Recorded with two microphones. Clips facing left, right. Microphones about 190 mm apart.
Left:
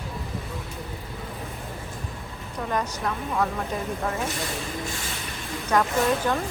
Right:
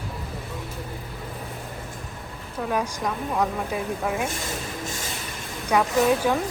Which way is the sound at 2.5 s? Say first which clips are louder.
Right 2 dB; 10° right (ahead or behind).